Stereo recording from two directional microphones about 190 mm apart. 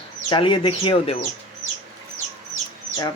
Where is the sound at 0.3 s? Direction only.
25° left (ahead or behind).